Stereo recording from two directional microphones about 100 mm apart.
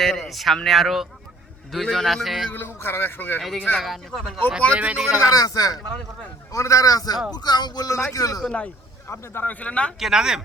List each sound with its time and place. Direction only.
0.0 s speech: centre (ahead or behind)
2.7 s speech: 25° left (ahead or behind)
3.4 s speech: centre (ahead or behind)
4.7 s speech: 15° right (ahead or behind)
5.3 s a man's voice: 35° left (ahead or behind)
9.0 s speech: 25° left (ahead or behind)
10.0 s speech: 5° right (ahead or behind)